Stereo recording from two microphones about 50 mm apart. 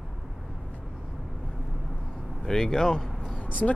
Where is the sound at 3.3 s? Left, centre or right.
Left.